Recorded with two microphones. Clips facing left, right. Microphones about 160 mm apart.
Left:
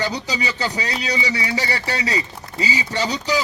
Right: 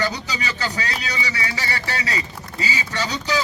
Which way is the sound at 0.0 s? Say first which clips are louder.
Left 2 dB; 15° left (ahead or behind).